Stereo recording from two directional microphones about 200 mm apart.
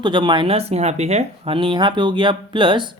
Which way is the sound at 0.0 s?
25° right (ahead or behind).